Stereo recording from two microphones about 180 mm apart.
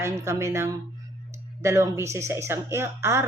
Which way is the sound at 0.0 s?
15° right (ahead or behind).